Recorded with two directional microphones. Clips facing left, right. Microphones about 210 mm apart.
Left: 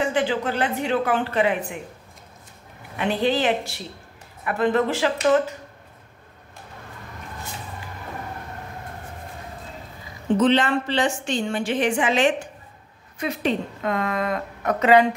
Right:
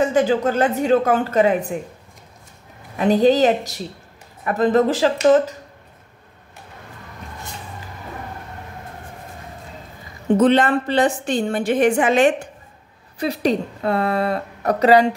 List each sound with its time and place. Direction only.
0.0 s a woman's voice: 45° right (ahead or behind)
3.0 s a woman's voice: 40° right (ahead or behind)
10.3 s a woman's voice: 50° right (ahead or behind)
13.2 s a woman's voice: 35° right (ahead or behind)